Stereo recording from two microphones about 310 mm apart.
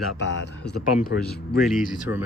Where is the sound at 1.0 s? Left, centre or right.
Left.